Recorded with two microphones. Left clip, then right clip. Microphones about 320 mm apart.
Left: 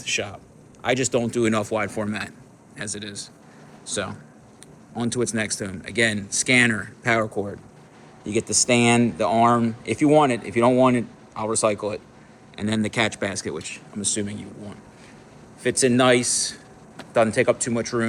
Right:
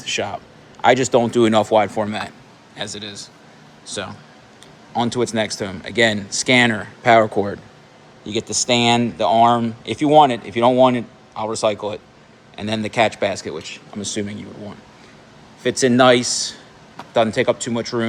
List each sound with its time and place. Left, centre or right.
0.0 s a man's voice: centre
16.0 s a man's voice: right